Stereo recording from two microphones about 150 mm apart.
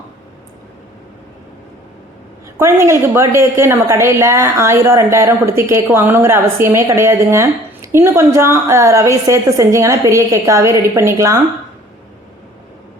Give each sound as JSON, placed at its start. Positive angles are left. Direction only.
{"t": 2.6, "sound": "a woman's voice", "side_deg": -15}